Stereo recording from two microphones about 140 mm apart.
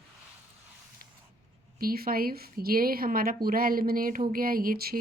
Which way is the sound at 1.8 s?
90° right.